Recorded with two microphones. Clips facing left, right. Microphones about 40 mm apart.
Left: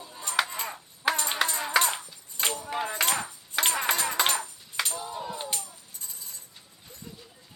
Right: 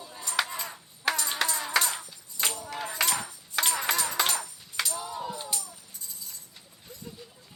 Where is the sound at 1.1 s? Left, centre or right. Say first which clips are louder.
Left 2 dB; left.